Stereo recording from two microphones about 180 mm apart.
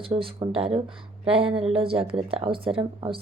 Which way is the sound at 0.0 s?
30° right (ahead or behind).